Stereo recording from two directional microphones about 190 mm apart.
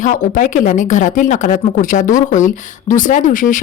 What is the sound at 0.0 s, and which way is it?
Speech, 45° left (ahead or behind).